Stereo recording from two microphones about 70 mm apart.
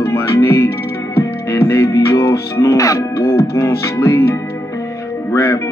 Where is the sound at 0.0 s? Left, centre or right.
Left.